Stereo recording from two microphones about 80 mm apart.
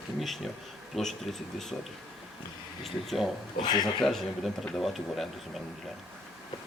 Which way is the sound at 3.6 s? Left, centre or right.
Left.